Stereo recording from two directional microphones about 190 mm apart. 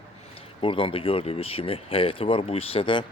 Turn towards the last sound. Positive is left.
turn(degrees=30)  # may be behind; listen again after turning